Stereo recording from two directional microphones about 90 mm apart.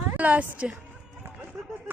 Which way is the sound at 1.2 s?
25° right (ahead or behind).